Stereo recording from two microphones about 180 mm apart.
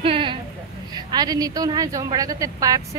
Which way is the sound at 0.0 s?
30° right (ahead or behind).